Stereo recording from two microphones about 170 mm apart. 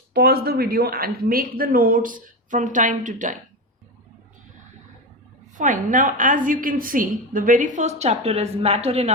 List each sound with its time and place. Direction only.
0.1 s a woman's voice: 65° right (ahead or behind); by 3.3 s 50° right (ahead or behind)
5.5 s a woman's voice: 50° right (ahead or behind)